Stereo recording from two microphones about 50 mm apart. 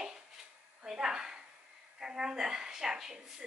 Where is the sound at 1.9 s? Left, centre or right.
Centre.